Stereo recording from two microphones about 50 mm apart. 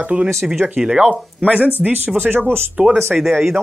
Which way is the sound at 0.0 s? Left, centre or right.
Right.